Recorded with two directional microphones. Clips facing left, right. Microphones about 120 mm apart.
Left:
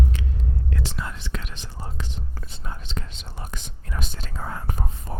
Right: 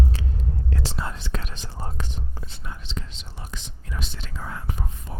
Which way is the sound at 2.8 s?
55° left (ahead or behind).